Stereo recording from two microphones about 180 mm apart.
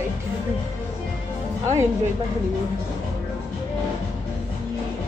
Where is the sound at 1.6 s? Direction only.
15° right (ahead or behind).